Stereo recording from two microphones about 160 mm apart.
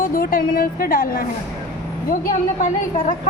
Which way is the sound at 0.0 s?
65° left (ahead or behind).